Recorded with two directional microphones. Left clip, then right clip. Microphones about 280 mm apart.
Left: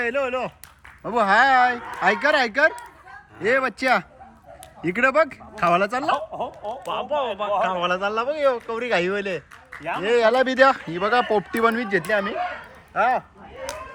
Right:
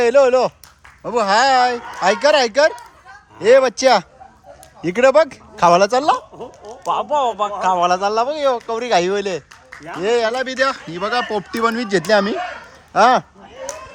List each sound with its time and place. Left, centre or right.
0.0 s speech: centre
1.0 s speech: centre